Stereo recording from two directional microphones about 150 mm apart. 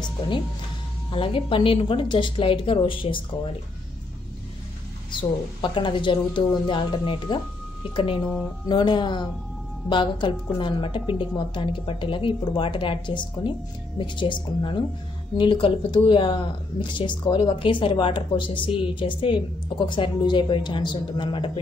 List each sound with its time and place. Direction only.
1.1 s speech: 35° left (ahead or behind)
5.1 s speech: 35° left (ahead or behind)